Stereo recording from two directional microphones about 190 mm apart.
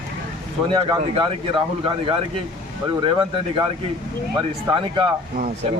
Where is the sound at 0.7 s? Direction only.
25° right (ahead or behind).